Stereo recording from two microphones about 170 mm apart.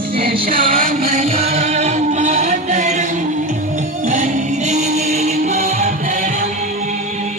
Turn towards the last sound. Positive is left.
turn(degrees=-45)  # may be behind; listen again after turning